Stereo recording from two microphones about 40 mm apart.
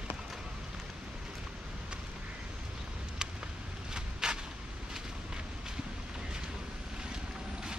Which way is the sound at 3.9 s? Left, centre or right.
Centre.